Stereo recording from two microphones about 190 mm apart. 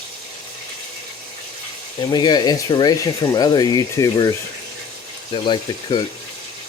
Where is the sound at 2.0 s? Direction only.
20° left (ahead or behind).